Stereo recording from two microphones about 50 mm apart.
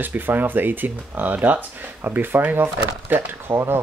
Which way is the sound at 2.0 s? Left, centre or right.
Right.